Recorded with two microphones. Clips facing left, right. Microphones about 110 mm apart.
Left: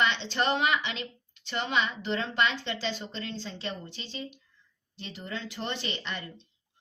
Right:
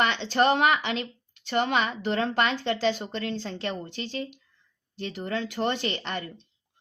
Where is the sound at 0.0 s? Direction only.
45° right (ahead or behind).